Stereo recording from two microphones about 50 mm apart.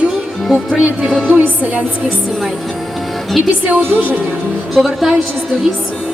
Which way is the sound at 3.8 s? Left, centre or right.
Right.